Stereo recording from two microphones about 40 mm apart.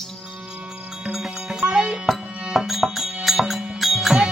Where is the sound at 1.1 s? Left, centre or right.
Centre.